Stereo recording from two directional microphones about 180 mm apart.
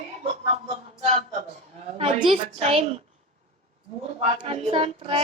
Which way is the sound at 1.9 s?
30° right (ahead or behind).